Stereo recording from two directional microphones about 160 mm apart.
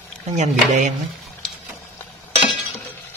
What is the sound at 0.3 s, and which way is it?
Speech, 50° right (ahead or behind).